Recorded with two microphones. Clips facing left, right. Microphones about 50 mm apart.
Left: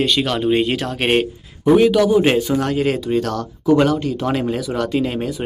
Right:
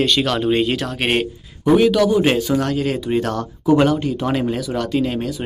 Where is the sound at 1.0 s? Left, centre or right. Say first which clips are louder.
Left 3 dB; centre.